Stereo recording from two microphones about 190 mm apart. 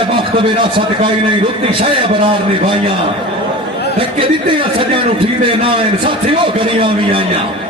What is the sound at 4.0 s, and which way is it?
A man's voice, 30° right (ahead or behind).